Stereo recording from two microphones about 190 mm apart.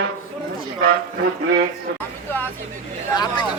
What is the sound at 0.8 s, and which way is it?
Speech, 50° right (ahead or behind).